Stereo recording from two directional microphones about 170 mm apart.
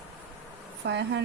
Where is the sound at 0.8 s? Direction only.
90° right.